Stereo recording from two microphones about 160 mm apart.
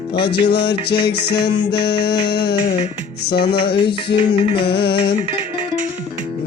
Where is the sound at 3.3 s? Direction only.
35° left (ahead or behind).